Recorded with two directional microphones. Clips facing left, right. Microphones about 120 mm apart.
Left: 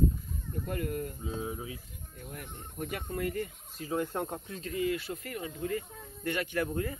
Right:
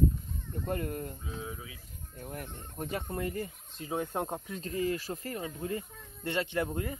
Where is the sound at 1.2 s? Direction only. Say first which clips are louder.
Left 5 dB; 25° left (ahead or behind).